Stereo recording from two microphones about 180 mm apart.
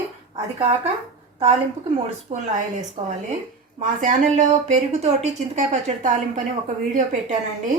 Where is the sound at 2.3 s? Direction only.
45° right (ahead or behind).